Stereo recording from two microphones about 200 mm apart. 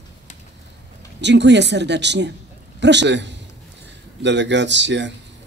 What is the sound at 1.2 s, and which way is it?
Speech, 60° right (ahead or behind).